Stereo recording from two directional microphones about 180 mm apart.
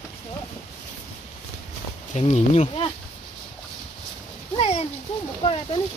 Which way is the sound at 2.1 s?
35° left (ahead or behind).